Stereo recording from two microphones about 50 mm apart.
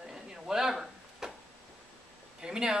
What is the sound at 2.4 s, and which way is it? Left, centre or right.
Speech, centre.